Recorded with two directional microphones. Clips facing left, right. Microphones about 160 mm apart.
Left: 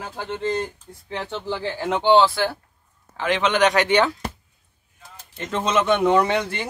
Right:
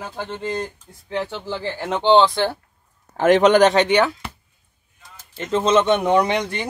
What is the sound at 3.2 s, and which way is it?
Speech, 45° right (ahead or behind).